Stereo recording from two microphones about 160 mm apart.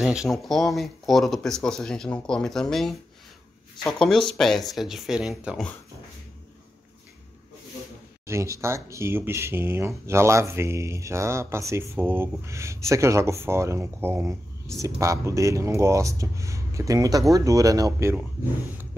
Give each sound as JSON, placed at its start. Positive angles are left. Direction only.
{"t": 0.0, "sound": "speech", "side_deg": -5}
{"t": 8.3, "sound": "speech", "side_deg": -15}